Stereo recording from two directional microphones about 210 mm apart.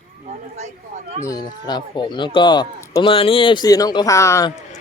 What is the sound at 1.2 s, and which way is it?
Speech, 20° left (ahead or behind).